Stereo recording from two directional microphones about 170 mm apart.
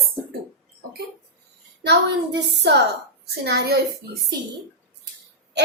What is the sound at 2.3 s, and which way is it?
Speech, 80° right.